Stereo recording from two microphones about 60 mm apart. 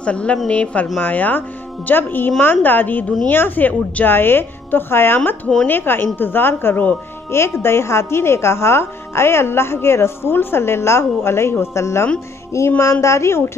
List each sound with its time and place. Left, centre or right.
0.0 s a woman's voice: centre; by 12.8 s left
13.0 s a woman's voice: left